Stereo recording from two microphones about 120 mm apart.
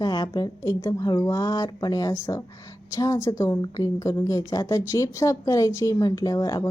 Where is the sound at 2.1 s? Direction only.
25° left (ahead or behind).